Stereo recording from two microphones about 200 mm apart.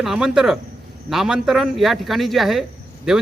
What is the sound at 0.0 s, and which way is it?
Speech, 5° right (ahead or behind).